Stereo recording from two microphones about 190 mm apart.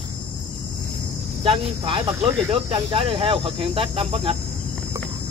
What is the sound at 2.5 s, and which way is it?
Speech, 25° right (ahead or behind).